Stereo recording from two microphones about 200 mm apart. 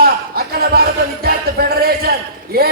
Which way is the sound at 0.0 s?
50° right (ahead or behind).